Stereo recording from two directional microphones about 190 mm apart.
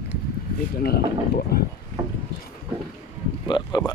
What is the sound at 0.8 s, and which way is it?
Speech, 55° left (ahead or behind).